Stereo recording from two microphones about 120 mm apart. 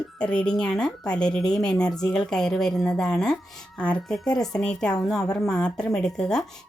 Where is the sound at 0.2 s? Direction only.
10° left (ahead or behind).